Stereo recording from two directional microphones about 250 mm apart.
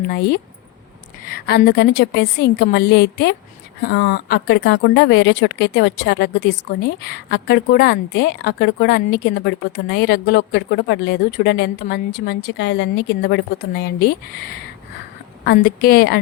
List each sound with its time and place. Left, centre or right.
0.1 s a woman's voice: left